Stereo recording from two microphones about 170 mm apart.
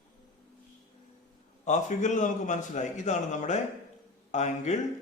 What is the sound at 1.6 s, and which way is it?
A man's voice, 45° left (ahead or behind).